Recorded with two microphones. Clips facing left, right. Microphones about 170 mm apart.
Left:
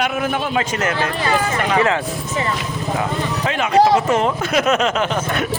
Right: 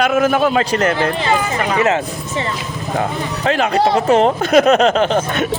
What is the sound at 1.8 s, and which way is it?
Speech, 20° right (ahead or behind).